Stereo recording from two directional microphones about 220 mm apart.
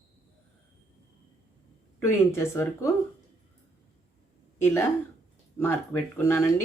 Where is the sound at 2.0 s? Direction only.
10° left (ahead or behind).